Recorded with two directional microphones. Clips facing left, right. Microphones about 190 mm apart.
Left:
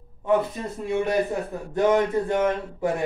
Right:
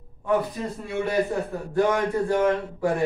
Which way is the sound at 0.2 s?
20° left (ahead or behind).